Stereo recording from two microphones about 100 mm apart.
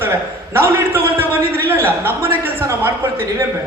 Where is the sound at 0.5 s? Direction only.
25° right (ahead or behind).